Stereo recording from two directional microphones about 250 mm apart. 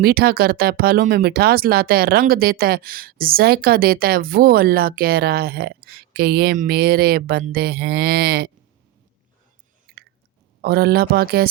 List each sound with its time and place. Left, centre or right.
0.0 s speech: right
10.6 s speech: right